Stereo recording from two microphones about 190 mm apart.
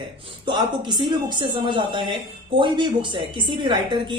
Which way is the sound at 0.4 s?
25° right (ahead or behind).